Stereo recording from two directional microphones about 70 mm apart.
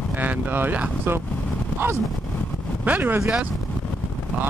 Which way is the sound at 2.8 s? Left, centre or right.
Right.